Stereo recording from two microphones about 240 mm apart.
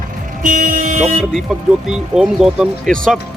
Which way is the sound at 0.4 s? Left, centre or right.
Right.